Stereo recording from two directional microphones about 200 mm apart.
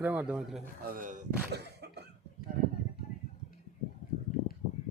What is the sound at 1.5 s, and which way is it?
Cough, 55° right (ahead or behind).